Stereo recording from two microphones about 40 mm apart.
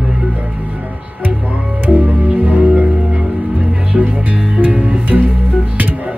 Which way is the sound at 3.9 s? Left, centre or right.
Right.